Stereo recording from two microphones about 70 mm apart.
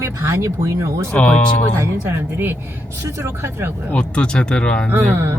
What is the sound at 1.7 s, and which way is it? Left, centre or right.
Speech, right.